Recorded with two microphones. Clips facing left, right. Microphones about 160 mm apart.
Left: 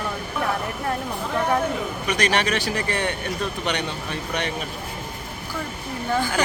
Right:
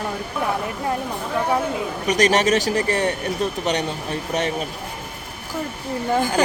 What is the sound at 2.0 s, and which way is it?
A woman's voice, 40° right (ahead or behind).